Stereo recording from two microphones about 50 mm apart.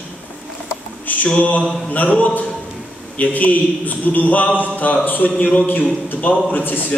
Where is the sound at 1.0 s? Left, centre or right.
Left.